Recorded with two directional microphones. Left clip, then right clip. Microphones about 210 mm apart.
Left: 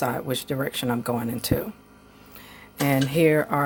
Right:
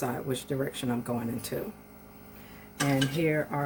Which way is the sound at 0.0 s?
45° left (ahead or behind).